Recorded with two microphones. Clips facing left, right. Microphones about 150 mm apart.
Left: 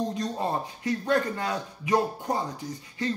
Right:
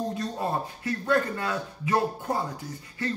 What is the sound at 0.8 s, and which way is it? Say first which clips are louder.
Speech: even; 20° left (ahead or behind).